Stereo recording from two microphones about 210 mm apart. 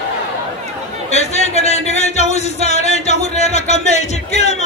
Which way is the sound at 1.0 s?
30° left (ahead or behind).